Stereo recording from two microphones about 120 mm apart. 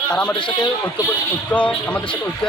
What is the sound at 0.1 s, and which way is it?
Speech, 5° left (ahead or behind).